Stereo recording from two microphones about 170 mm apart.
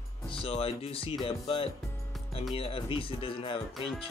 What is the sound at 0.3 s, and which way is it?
Speech, 35° left (ahead or behind).